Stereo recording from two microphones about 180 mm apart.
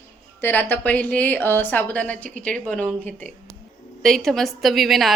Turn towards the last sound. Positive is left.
turn(degrees=0)  # may be behind; listen again after turning